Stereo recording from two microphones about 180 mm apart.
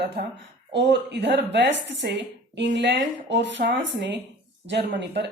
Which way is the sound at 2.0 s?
70° right (ahead or behind).